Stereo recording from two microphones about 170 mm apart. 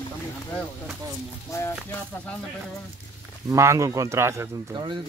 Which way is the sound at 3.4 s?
15° right (ahead or behind).